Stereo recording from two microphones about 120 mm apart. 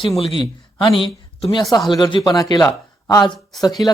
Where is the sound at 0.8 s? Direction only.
45° left (ahead or behind).